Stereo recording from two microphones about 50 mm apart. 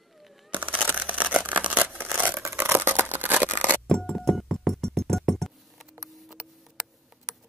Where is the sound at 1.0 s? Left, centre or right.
Right.